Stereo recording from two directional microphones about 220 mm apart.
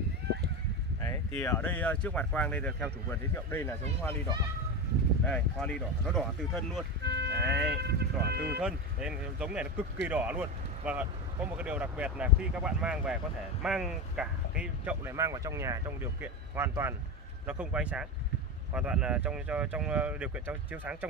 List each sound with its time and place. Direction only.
1.4 s speech: 10° left (ahead or behind)
5.2 s speech: 5° left (ahead or behind)
7.0 s livestock: 50° right (ahead or behind)
7.4 s speech: centre (ahead or behind)
7.7 s speech: 45° right (ahead or behind)
8.5 s speech: 5° right (ahead or behind)